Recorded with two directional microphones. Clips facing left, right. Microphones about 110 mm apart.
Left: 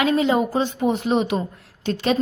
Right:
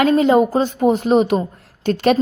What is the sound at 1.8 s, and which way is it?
Speech, 55° right (ahead or behind).